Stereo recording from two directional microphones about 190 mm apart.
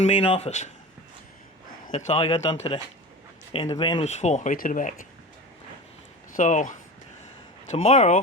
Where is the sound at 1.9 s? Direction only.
40° left (ahead or behind).